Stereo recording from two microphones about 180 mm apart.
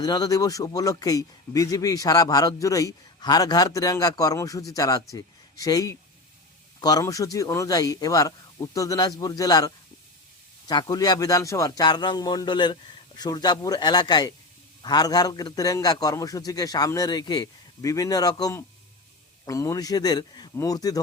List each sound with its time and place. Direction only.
0.0 s a man's voice: 20° left (ahead or behind)